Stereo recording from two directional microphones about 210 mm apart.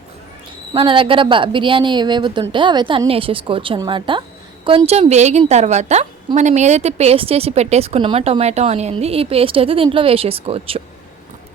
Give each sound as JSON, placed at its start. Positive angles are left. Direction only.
{"t": 0.7, "sound": "a woman's voice", "side_deg": -25}